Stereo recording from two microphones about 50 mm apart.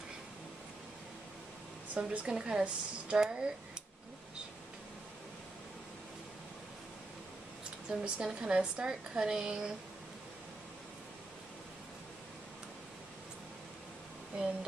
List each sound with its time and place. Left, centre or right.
2.0 s speech: centre
8.0 s speech: centre
14.3 s speech: right